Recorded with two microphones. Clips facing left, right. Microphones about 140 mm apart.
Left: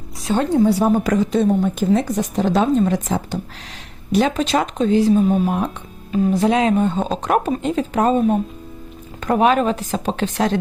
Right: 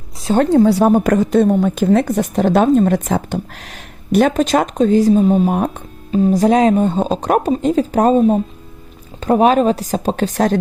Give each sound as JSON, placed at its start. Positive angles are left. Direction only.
{"t": 0.3, "sound": "speech", "side_deg": -70}
{"t": 1.6, "sound": "speech", "side_deg": -85}
{"t": 9.2, "sound": "speech", "side_deg": -35}